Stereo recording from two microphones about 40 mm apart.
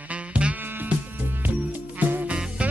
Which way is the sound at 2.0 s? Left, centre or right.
Right.